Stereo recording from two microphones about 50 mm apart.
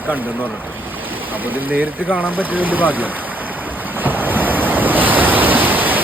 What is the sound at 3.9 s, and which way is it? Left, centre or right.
Waves, right.